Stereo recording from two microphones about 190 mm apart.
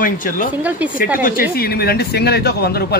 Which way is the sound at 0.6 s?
10° right (ahead or behind).